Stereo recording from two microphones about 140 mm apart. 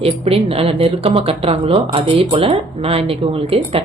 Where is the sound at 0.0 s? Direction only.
45° right (ahead or behind).